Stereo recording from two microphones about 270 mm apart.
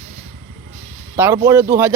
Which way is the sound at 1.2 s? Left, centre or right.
Centre.